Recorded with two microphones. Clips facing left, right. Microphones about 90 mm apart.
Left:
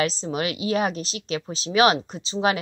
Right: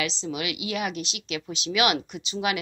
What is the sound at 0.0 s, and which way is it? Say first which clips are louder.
A woman's voice: left 5 dB; 40° left (ahead or behind).